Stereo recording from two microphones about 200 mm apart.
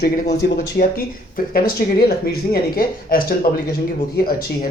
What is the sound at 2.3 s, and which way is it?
Speech, 50° left (ahead or behind).